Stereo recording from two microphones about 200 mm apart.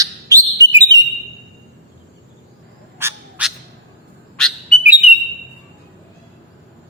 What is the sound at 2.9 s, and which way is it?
Bird, 10° right (ahead or behind).